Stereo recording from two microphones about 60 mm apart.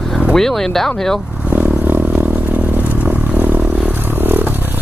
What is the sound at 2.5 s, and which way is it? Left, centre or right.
Vehicle, right.